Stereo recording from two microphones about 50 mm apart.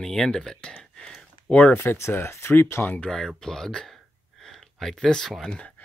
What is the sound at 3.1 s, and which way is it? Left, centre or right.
Speech, centre.